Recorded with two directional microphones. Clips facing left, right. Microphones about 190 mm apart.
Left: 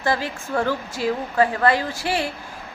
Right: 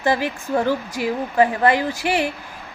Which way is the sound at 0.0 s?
15° right (ahead or behind).